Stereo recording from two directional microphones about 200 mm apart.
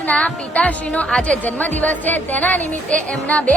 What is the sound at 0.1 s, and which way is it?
Speech, 5° left (ahead or behind).